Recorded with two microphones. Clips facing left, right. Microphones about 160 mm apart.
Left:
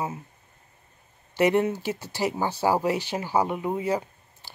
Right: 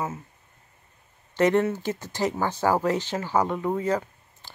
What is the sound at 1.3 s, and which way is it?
Speech, 10° left (ahead or behind).